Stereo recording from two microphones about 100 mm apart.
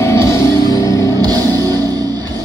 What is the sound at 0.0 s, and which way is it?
Music, 30° left (ahead or behind).